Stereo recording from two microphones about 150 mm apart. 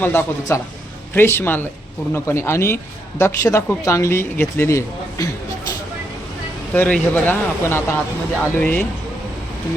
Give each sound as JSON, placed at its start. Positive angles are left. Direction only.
{"t": 0.0, "sound": "speech", "side_deg": 15}
{"t": 6.7, "sound": "speech", "side_deg": 10}